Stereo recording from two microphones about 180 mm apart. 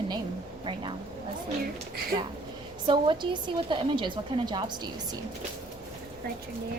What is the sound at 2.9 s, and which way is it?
A woman's voice, 25° right (ahead or behind).